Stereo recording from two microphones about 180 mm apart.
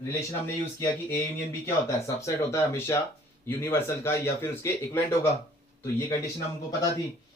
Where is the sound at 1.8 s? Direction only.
15° left (ahead or behind).